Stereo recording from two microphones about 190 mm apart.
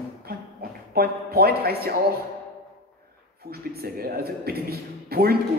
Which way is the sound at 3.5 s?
55° right (ahead or behind).